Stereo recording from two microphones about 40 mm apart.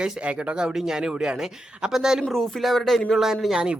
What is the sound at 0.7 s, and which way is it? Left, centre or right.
Speech, centre.